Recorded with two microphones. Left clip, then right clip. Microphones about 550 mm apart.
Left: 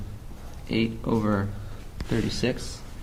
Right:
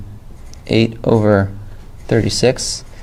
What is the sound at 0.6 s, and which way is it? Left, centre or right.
Speech, right.